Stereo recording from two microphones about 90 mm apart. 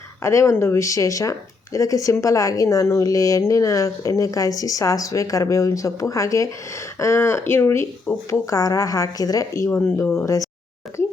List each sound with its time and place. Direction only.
0.2 s speech: 35° left (ahead or behind)
10.2 s speech: 35° left (ahead or behind)